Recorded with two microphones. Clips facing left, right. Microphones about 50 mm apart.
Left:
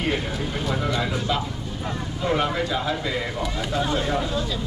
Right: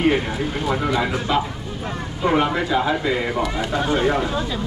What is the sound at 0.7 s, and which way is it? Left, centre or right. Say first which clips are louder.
Speech: right 4 dB; centre.